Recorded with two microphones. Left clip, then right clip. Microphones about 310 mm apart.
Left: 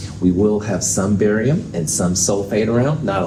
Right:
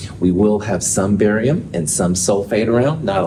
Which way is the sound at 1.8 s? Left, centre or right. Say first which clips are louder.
Right 2 dB; right.